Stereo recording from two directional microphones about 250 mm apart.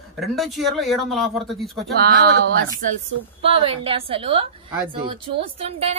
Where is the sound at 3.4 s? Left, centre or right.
Right.